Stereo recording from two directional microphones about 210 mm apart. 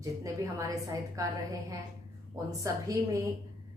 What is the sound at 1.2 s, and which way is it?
A woman's voice, 15° right (ahead or behind).